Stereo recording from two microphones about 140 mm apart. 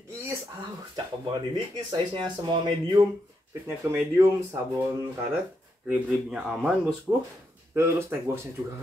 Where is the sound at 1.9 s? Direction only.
35° right (ahead or behind).